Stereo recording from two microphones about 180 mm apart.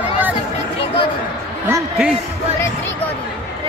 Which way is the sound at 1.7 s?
5° right (ahead or behind).